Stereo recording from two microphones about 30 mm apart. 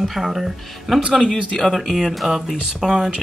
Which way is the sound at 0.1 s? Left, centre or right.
Centre.